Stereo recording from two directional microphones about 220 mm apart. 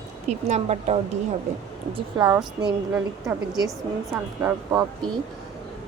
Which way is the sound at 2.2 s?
15° right (ahead or behind).